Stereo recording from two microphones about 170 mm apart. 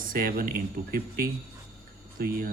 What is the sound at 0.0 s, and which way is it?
Speech, 55° right (ahead or behind).